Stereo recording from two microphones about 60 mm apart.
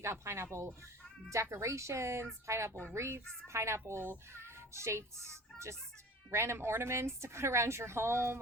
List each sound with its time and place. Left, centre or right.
0.0 s a child's voice: right